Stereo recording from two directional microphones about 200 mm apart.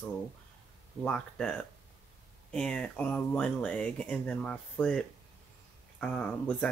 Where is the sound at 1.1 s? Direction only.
5° left (ahead or behind).